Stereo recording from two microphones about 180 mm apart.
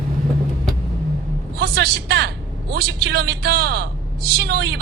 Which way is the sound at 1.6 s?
60° right (ahead or behind).